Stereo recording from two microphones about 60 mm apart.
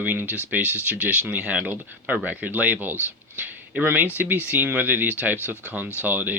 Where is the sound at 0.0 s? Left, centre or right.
Right.